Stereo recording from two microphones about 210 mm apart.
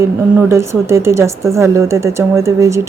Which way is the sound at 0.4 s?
15° right (ahead or behind).